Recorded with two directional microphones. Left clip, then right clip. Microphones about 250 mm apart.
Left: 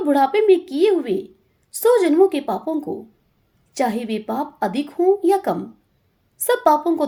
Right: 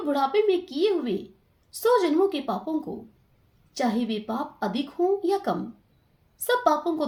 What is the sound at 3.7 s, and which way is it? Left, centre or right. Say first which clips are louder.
Speech: left 5 dB; left.